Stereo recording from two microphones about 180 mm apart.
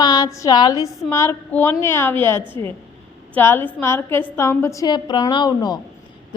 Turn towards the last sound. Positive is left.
turn(degrees=25)  # may be behind; listen again after turning